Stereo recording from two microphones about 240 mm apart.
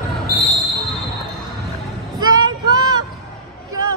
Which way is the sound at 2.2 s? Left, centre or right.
Centre.